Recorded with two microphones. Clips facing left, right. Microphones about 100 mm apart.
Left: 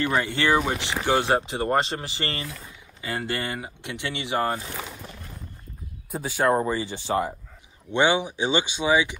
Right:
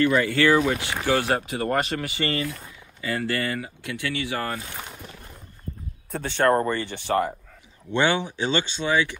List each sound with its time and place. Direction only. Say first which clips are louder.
0.0 s speech: right 4 dB; 25° left (ahead or behind)
6.1 s speech: right 1 dB; 10° left (ahead or behind)